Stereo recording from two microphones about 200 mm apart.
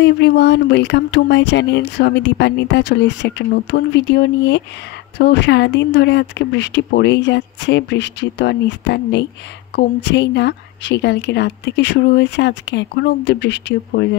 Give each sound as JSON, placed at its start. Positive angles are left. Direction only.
{"t": 0.0, "sound": "speech", "side_deg": 60}